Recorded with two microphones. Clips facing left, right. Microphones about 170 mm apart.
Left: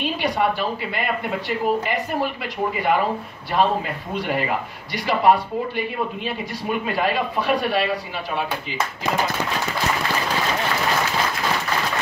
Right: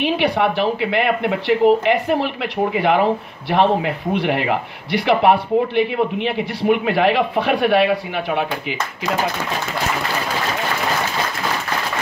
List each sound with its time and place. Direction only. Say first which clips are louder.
0.0 s speech: right 4 dB; 70° right (ahead or behind)